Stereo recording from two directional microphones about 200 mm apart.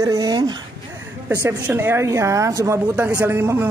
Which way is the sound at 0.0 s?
15° right (ahead or behind).